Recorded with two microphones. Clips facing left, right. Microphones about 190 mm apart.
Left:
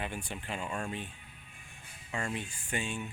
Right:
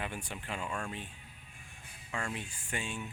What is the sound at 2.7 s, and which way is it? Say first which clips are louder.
Speech: left 3 dB; 5° right (ahead or behind).